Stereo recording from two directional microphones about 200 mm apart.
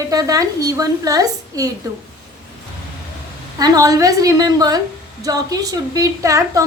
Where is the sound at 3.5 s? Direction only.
20° right (ahead or behind).